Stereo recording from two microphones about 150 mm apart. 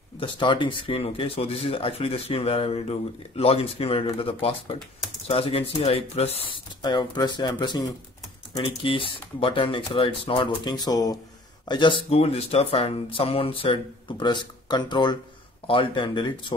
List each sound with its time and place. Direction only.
0.2 s speech: 30° left (ahead or behind)
12.1 s speech: 40° left (ahead or behind)